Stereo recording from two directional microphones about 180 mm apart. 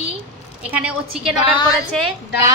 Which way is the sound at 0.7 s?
5° right (ahead or behind).